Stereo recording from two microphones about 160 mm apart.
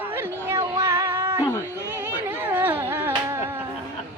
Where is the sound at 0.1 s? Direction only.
15° right (ahead or behind).